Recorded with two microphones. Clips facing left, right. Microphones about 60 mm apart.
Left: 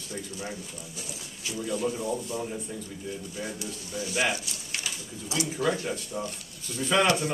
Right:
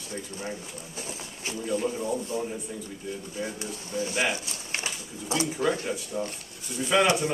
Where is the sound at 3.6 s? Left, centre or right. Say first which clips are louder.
Right 3 dB; right.